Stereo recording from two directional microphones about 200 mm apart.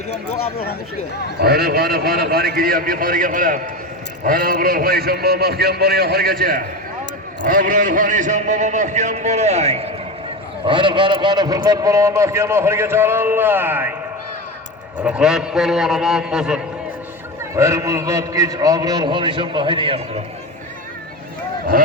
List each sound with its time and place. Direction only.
1.4 s a man's voice: 50° right (ahead or behind); by 13.9 s 10° right (ahead or behind)
15.0 s a man's voice: 5° right (ahead or behind)
17.5 s a man's voice: 15° right (ahead or behind)